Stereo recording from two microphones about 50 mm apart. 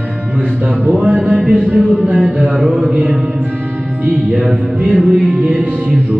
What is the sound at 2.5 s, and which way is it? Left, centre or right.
Mantra, centre.